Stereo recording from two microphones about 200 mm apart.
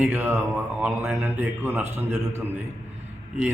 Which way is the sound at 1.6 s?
10° right (ahead or behind).